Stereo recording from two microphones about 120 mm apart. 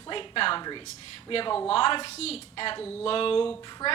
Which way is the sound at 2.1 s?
60° left (ahead or behind).